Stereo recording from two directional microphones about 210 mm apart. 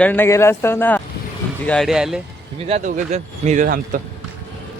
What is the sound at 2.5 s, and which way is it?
Speech, 30° right (ahead or behind).